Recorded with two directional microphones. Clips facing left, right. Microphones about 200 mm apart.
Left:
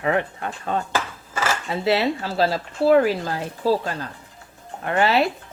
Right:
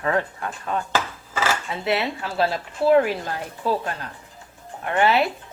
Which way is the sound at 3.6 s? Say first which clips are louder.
Left 3 dB; 35° left (ahead or behind).